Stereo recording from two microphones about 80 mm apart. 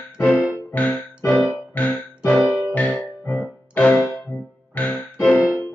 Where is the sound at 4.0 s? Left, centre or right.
Centre.